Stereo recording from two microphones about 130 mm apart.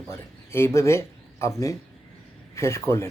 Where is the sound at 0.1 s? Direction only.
20° left (ahead or behind).